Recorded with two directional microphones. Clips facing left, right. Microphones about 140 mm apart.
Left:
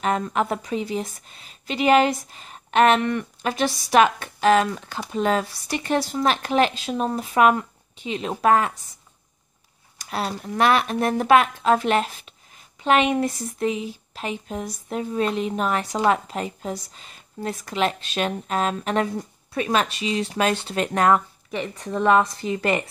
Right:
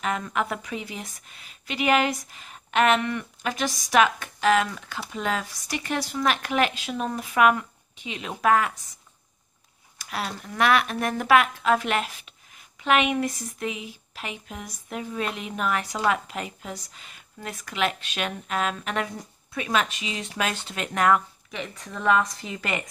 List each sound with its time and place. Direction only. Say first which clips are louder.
0.0 s speech: left 4 dB; 30° left (ahead or behind)
9.9 s speech: left 4 dB; 30° left (ahead or behind)